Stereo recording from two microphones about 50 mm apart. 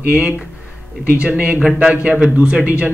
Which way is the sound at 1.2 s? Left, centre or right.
Right.